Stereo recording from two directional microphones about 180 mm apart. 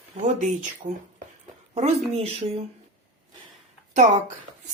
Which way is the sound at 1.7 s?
35° right (ahead or behind).